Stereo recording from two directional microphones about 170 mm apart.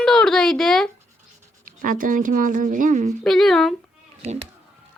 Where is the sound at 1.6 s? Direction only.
50° right (ahead or behind).